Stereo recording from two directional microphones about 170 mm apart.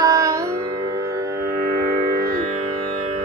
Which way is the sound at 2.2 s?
15° right (ahead or behind).